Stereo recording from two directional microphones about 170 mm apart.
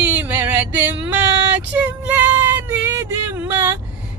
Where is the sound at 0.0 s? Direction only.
10° right (ahead or behind).